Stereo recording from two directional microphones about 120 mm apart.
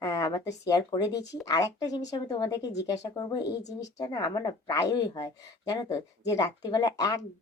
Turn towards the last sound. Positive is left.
turn(degrees=30)  # may be behind; listen again after turning